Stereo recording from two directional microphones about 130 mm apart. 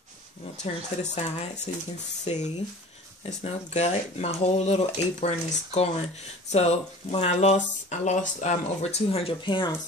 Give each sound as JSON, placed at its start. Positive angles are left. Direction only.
{"t": 0.7, "sound": "speech", "side_deg": 55}